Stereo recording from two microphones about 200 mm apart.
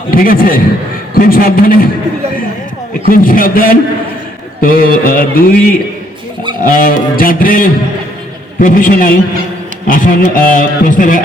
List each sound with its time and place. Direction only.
0.1 s music: 45° left (ahead or behind)
3.1 s music: 45° left (ahead or behind)